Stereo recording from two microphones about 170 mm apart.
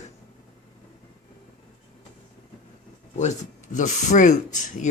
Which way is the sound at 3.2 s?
45° left (ahead or behind).